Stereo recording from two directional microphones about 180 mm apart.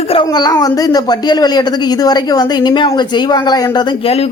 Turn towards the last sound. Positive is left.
turn(degrees=35)  # may be behind; listen again after turning